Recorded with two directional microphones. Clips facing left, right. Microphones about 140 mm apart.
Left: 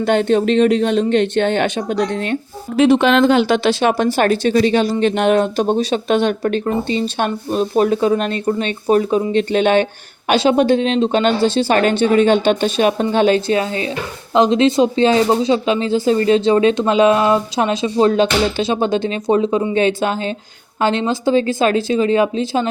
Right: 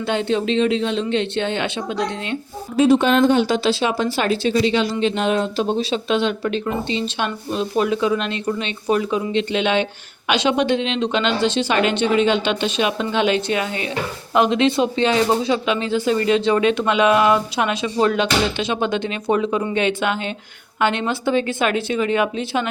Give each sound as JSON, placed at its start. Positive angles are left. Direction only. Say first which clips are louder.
{"t": 0.0, "sound": "speech", "louder": "left 6 dB", "side_deg": 55}
{"t": 2.7, "sound": "speech", "louder": "left 2 dB", "side_deg": 70}
{"t": 20.0, "sound": "speech", "louder": "left 3 dB", "side_deg": 35}